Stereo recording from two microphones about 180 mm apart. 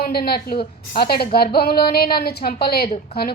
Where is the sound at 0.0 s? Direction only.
60° left (ahead or behind).